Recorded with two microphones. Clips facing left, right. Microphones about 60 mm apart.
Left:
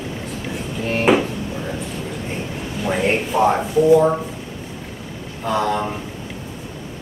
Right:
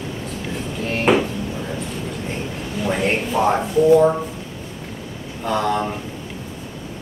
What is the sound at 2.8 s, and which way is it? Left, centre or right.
Speech, centre.